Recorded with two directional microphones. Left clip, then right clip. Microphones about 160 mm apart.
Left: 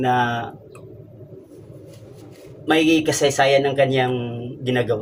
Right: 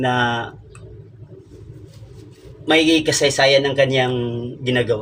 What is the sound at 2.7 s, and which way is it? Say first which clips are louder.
Speech: right 2 dB; 20° left (ahead or behind).